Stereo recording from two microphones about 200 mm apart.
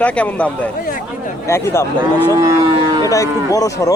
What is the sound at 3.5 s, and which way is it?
Speech, 15° left (ahead or behind).